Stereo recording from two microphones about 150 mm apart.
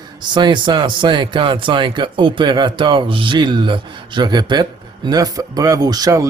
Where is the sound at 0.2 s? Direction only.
30° right (ahead or behind).